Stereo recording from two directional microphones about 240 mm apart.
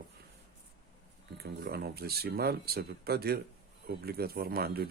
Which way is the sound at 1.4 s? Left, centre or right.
Right.